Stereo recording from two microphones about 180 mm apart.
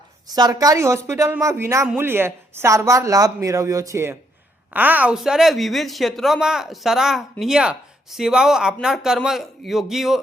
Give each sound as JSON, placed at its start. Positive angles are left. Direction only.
{"t": 0.3, "sound": "speech", "side_deg": -20}